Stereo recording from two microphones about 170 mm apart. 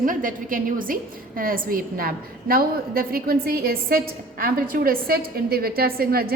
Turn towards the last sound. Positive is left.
turn(degrees=-60)  # may be behind; listen again after turning